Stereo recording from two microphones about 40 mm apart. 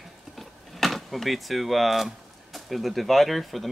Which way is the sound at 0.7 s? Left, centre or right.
Centre.